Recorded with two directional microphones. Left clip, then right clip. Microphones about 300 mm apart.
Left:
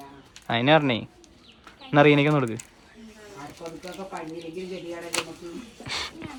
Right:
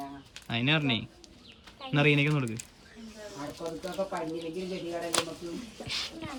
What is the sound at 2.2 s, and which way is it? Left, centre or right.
Speech, left.